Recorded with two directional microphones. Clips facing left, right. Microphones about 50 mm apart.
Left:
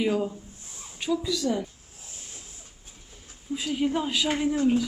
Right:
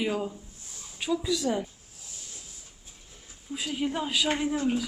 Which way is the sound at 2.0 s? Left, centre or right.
Left.